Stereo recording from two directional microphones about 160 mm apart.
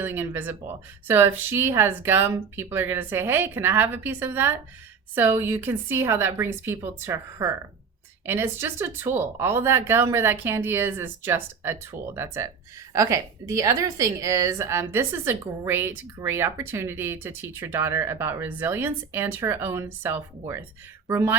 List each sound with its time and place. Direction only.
0.0 s a woman's voice: 15° right (ahead or behind)